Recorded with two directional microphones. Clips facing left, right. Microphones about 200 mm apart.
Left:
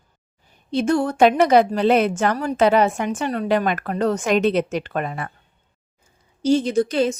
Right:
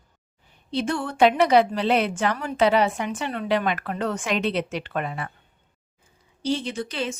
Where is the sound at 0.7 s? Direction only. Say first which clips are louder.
Left 7 dB; 45° left (ahead or behind).